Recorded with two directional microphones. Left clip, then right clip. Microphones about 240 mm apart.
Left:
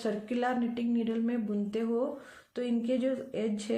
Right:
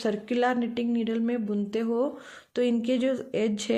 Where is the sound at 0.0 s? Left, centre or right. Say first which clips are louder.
Right 6 dB; right.